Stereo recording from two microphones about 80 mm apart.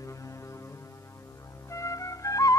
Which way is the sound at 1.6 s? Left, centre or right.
Left.